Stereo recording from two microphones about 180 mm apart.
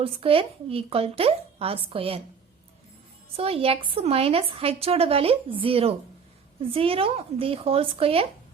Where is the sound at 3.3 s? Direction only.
30° right (ahead or behind).